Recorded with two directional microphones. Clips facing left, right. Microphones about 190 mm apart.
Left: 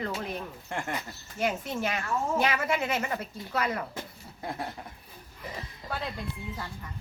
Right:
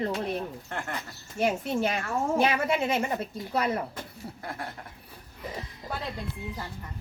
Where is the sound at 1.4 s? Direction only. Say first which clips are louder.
Right 4 dB; 30° right (ahead or behind).